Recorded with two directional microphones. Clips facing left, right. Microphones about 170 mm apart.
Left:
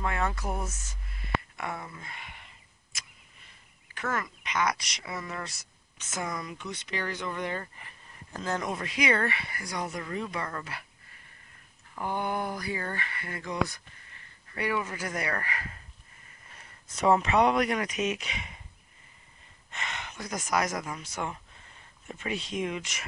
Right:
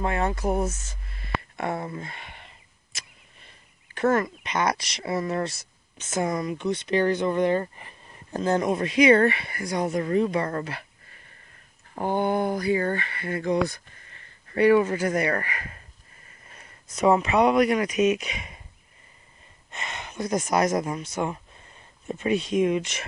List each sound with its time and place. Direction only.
0.0 s speech: 25° right (ahead or behind)
1.6 s speech: 35° right (ahead or behind)
3.9 s speech: 30° right (ahead or behind)
10.0 s speech: 35° right (ahead or behind)
11.9 s speech: 30° right (ahead or behind)
14.6 s speech: 35° right (ahead or behind)
17.0 s speech: 10° right (ahead or behind)
20.0 s speech: 20° right (ahead or behind)